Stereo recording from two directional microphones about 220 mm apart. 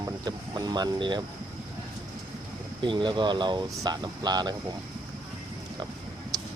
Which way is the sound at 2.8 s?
20° right (ahead or behind).